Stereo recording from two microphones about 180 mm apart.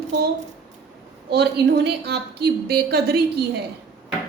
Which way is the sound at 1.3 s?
65° right (ahead or behind).